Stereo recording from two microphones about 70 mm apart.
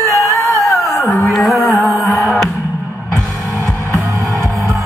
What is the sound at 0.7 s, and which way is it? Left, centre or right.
Music, left.